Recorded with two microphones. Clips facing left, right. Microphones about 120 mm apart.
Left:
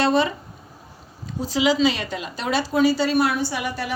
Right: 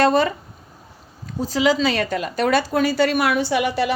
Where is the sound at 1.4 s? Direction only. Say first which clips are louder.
Right 1 dB; 45° right (ahead or behind).